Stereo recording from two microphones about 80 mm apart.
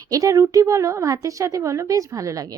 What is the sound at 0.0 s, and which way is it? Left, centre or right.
A woman's voice, right.